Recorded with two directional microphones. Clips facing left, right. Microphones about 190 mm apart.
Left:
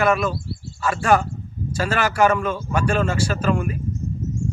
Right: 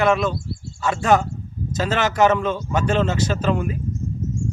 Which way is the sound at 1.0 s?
20° right (ahead or behind).